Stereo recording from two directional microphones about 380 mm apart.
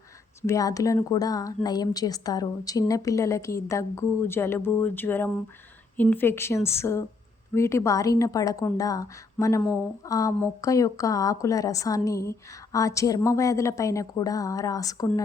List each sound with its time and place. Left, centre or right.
0.4 s a woman's voice: centre